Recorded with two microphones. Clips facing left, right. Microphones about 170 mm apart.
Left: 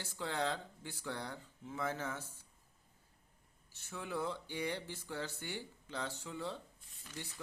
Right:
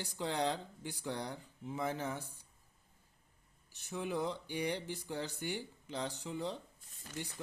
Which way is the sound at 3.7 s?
15° right (ahead or behind).